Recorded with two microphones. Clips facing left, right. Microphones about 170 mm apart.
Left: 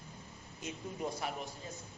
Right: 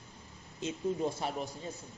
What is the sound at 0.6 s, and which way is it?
Speech, 25° right (ahead or behind).